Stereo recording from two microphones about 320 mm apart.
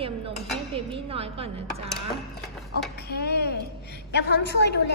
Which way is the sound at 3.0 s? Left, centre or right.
Left.